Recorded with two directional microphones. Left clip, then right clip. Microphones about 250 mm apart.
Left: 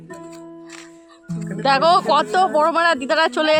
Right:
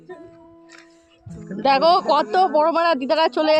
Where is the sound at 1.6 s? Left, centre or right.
Centre.